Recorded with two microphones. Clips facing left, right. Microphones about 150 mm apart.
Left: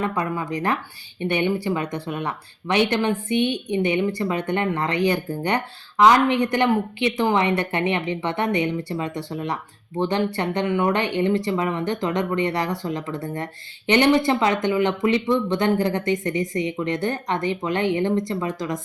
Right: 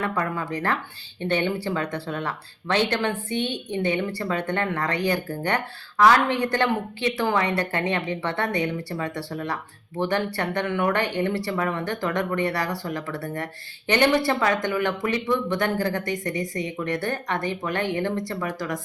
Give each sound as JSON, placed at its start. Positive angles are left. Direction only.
{"t": 0.0, "sound": "speech", "side_deg": 15}